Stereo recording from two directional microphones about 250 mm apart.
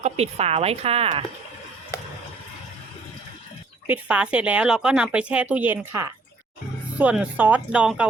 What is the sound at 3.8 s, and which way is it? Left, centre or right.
Speech, centre.